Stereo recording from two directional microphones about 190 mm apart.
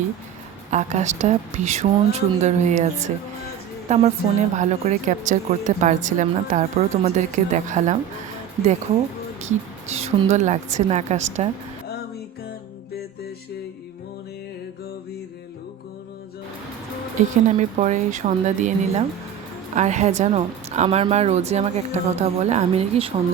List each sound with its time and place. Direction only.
0.7 s a woman's voice: 40° right (ahead or behind)
9.4 s speech: 35° right (ahead or behind)
17.2 s speech: 40° right (ahead or behind)